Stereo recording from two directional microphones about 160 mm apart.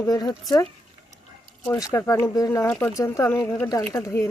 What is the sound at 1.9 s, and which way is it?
Speech, 20° left (ahead or behind).